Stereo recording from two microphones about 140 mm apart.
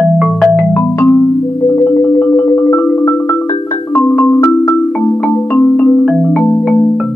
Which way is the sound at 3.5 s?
30° left (ahead or behind).